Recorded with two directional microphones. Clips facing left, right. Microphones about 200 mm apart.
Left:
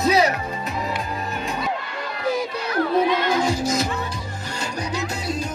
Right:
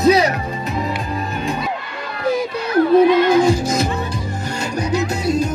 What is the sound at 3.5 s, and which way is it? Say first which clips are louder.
Music: right 5 dB; 55° right (ahead or behind).